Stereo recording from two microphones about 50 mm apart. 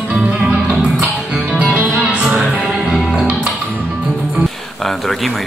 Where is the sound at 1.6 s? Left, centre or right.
Right.